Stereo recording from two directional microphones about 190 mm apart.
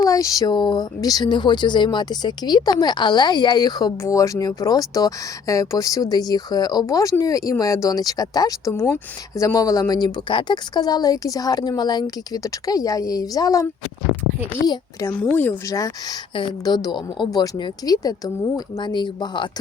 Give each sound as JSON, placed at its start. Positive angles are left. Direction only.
{"t": 0.0, "sound": "speech", "side_deg": 20}